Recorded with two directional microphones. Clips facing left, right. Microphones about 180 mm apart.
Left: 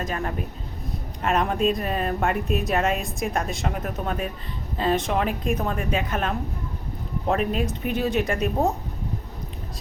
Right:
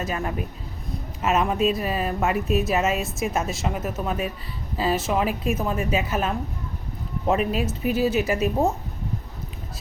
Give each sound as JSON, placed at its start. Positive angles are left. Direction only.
{"t": 0.0, "sound": "speech", "side_deg": -10}